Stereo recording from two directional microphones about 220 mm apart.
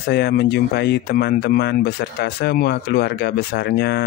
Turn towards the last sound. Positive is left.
turn(degrees=45)  # may be behind; listen again after turning